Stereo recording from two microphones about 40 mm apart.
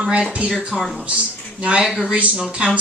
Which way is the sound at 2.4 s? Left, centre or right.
Centre.